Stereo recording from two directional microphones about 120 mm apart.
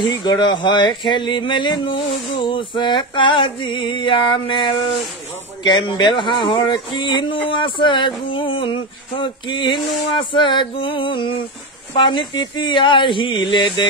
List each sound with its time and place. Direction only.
0.0 s speech: 40° left (ahead or behind)